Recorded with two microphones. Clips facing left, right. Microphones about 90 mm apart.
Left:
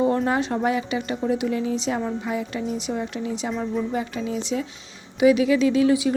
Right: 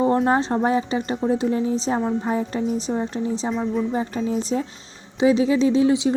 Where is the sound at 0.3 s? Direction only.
30° right (ahead or behind).